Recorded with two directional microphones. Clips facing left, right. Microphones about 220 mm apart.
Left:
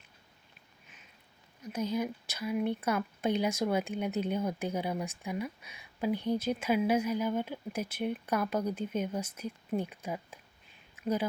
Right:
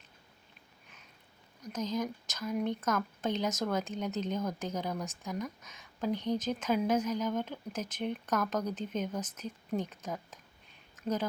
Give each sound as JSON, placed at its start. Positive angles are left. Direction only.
{"t": 1.6, "sound": "speech", "side_deg": 10}